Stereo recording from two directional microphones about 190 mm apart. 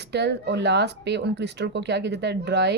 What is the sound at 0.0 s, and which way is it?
Speech, 60° right (ahead or behind).